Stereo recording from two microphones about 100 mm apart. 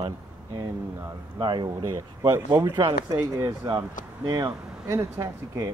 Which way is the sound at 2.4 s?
45° right (ahead or behind).